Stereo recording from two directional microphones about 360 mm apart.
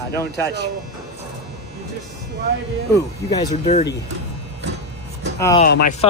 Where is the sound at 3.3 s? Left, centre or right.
Centre.